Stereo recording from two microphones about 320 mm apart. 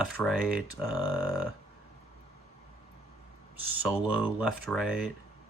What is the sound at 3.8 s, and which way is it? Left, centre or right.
Speech, centre.